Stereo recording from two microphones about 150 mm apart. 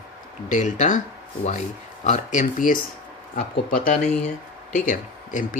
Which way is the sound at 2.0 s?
55° left (ahead or behind).